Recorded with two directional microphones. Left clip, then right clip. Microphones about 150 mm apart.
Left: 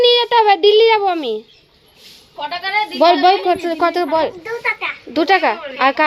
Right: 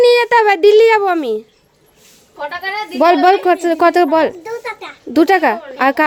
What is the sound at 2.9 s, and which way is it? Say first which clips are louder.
A woman's voice: right 2 dB; 60° right (ahead or behind).